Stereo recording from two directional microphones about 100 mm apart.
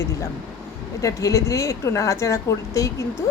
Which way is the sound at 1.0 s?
30° left (ahead or behind).